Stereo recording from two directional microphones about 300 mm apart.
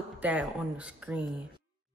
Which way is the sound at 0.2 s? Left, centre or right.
Centre.